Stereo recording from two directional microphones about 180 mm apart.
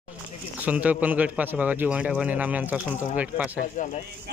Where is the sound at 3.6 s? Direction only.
45° left (ahead or behind).